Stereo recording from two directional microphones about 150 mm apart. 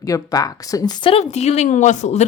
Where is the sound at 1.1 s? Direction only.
45° left (ahead or behind).